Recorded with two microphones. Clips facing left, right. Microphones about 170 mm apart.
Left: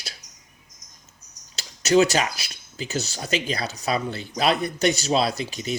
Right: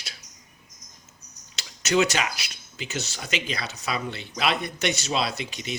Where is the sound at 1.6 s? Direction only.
35° left (ahead or behind).